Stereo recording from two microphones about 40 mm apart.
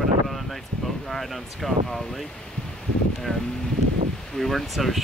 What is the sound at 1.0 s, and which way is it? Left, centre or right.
Speech, centre.